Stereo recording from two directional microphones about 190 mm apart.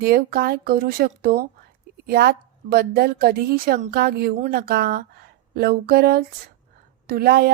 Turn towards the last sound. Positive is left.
turn(degrees=-55)  # may be behind; listen again after turning